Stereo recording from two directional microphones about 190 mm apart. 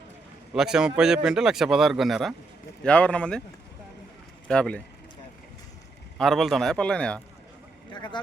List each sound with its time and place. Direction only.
0.5 s speech: 5° right (ahead or behind)
4.4 s speech: 5° left (ahead or behind)
6.1 s speech: centre (ahead or behind)
7.9 s speech: 25° left (ahead or behind)